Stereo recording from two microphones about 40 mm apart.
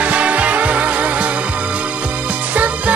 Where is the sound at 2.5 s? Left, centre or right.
Right.